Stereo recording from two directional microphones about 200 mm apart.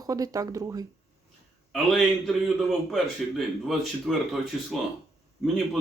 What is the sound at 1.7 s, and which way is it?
A man's voice, centre (ahead or behind).